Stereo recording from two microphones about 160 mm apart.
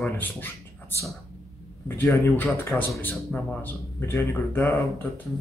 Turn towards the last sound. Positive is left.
turn(degrees=10)  # may be behind; listen again after turning